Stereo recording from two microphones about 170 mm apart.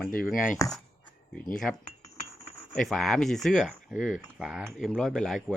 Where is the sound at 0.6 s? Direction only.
20° left (ahead or behind).